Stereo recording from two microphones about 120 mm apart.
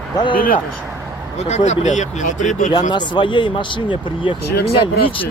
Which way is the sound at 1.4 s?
70° left (ahead or behind).